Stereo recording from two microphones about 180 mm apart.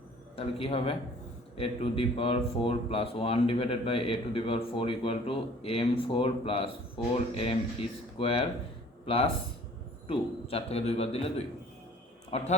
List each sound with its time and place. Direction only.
0.3 s speech: 30° left (ahead or behind)